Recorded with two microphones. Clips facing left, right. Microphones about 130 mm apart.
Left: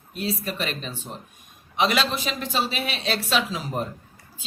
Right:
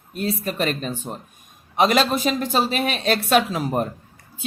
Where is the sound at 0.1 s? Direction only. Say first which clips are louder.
Right 3 dB; 50° right (ahead or behind).